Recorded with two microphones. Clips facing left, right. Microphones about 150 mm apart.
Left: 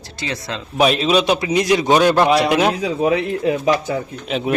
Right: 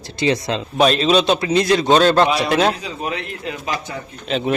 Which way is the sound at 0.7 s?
10° left (ahead or behind).